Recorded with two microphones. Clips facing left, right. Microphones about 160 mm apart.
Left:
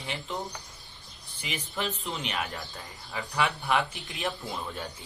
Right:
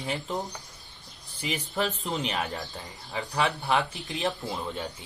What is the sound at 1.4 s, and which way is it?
Speech, 40° right (ahead or behind).